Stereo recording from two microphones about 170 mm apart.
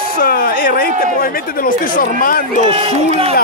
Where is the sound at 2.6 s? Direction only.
35° right (ahead or behind).